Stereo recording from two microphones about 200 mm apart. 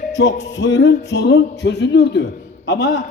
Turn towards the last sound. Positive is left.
turn(degrees=60)  # may be behind; listen again after turning